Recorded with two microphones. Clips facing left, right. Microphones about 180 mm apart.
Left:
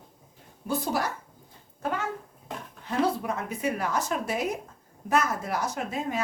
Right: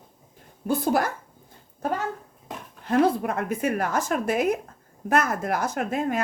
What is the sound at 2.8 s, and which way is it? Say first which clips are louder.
A woman's voice: right 5 dB; 55° right (ahead or behind).